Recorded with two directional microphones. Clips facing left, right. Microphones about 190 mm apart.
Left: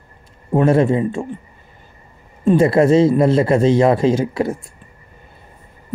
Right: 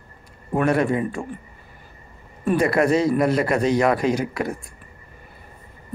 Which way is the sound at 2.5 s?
25° left (ahead or behind).